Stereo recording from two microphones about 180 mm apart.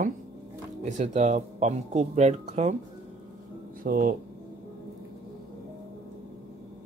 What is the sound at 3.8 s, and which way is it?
Speech, 50° right (ahead or behind).